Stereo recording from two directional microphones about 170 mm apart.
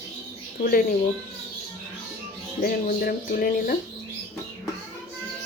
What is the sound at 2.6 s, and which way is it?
Speech, 60° left (ahead or behind).